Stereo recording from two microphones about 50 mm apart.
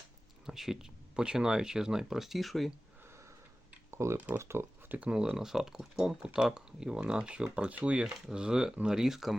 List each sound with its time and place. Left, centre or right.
0.4 s speech: centre
3.9 s speech: right
5.0 s speech: centre
8.0 s speech: centre